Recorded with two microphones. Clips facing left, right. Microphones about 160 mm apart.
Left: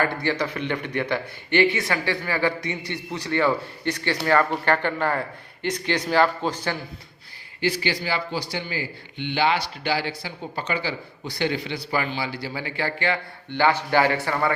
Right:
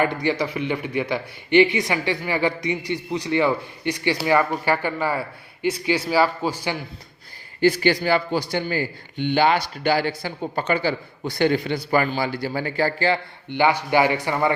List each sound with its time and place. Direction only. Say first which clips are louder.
0.0 s speech: right 2 dB; 15° right (ahead or behind)
7.6 s a man's voice: right 7 dB; 50° right (ahead or behind)
13.5 s speech: right 2 dB; 15° right (ahead or behind)